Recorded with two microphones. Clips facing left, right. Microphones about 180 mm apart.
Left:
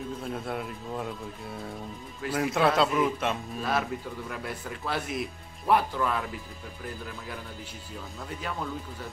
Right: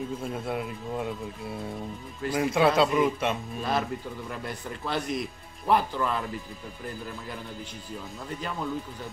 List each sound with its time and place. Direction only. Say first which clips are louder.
0.2 s speech: right 2 dB; centre (ahead or behind)